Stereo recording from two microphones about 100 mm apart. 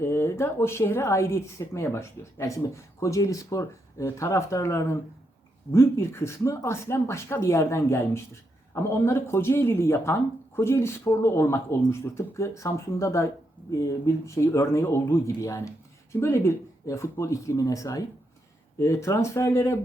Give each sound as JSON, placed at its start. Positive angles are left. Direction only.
{"t": 0.0, "sound": "speech", "side_deg": 25}